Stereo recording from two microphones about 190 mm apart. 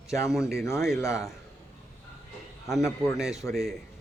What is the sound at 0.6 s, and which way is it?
Speech, 15° left (ahead or behind).